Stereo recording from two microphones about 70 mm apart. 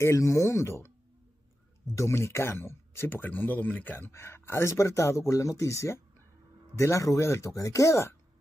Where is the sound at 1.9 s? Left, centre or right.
Left.